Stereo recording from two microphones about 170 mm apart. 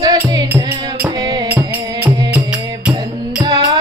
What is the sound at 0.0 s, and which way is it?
Music, 20° right (ahead or behind).